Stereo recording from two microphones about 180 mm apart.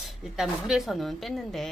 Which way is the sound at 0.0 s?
Centre (ahead or behind).